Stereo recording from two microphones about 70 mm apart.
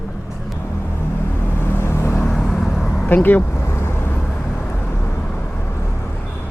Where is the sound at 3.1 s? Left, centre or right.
Left.